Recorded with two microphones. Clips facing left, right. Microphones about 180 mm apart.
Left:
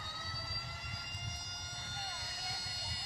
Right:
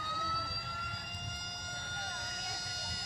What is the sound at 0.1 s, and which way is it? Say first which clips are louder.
Vehicle: right 7 dB; 55° right (ahead or behind).